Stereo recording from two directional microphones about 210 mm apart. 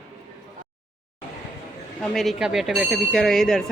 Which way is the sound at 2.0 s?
Centre (ahead or behind).